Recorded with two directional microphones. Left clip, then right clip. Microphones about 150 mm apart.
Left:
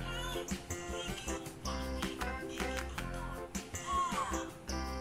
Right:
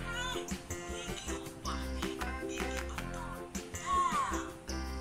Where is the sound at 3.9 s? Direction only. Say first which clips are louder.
Right 4 dB; centre (ahead or behind).